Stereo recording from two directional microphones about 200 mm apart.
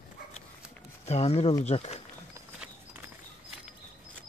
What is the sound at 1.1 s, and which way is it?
Speech, 30° left (ahead or behind).